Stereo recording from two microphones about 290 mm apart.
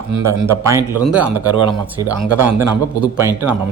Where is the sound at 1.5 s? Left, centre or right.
Centre.